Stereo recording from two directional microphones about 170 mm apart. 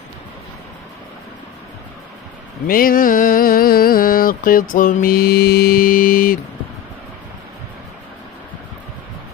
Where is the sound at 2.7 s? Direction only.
55° left (ahead or behind).